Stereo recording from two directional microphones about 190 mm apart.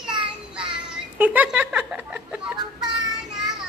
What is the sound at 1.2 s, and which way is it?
Speech, 10° right (ahead or behind).